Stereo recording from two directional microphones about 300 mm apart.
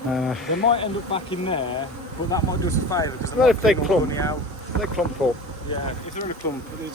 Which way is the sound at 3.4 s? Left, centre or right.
Centre.